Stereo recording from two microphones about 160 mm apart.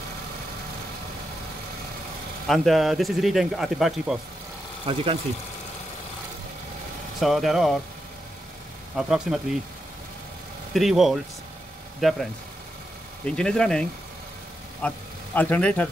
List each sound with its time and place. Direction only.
2.4 s speech: centre (ahead or behind)
4.9 s speech: 30° right (ahead or behind)
7.2 s speech: centre (ahead or behind)
8.9 s speech: 5° right (ahead or behind)
10.7 s a man's voice: centre (ahead or behind)